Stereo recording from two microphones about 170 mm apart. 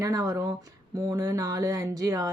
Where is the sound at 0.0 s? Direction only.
20° right (ahead or behind).